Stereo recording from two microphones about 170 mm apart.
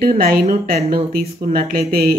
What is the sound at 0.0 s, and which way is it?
Speech, 60° right (ahead or behind).